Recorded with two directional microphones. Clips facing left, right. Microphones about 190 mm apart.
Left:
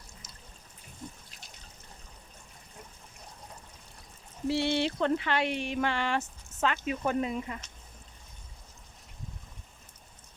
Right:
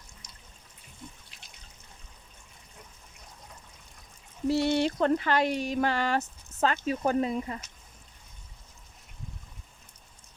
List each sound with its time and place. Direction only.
1.0 s water: 40° left (ahead or behind)
4.4 s speech: 40° right (ahead or behind)